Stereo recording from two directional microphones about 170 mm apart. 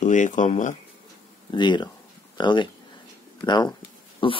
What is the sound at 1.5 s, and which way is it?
Speech, 25° left (ahead or behind).